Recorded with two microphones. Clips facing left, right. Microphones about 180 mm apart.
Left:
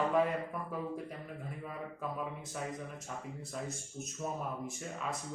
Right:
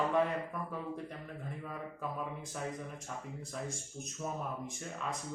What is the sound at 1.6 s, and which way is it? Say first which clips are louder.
Speech: left 1 dB; centre (ahead or behind).